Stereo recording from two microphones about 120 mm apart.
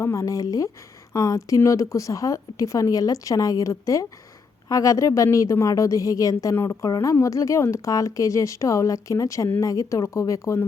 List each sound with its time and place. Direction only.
0.0 s a woman's voice: 25° left (ahead or behind)